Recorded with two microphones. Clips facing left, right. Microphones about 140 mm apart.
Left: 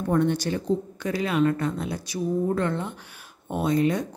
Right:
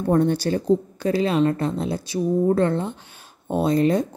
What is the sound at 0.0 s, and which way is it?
A woman's voice, 35° right (ahead or behind).